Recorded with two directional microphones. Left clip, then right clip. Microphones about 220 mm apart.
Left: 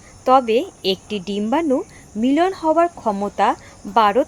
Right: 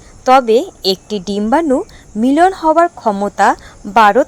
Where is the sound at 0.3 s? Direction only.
30° right (ahead or behind).